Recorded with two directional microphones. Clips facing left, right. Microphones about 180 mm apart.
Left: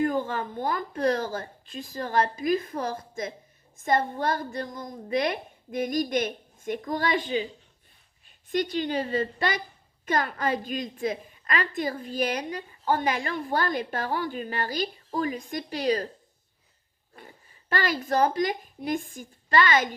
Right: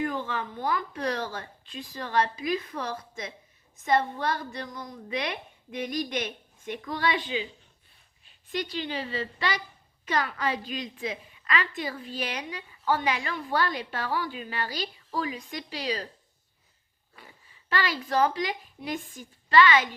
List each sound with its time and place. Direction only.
0.0 s a woman's voice: 45° left (ahead or behind)
8.4 s a woman's voice: 45° left (ahead or behind)
17.2 s a woman's voice: 45° left (ahead or behind)